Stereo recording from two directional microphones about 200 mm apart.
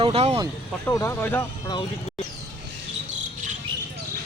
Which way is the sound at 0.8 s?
10° left (ahead or behind).